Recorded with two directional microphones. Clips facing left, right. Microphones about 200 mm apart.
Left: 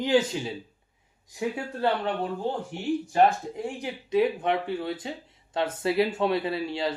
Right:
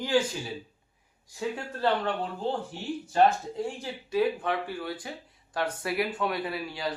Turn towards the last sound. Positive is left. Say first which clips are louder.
# left 4 dB
turn(degrees=25)  # may be behind; listen again after turning